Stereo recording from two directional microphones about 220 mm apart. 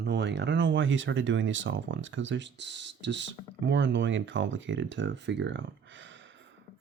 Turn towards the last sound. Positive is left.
turn(degrees=-60)  # may be behind; listen again after turning